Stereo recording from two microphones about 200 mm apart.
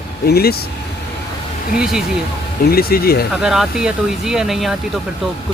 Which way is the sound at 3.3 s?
Centre (ahead or behind).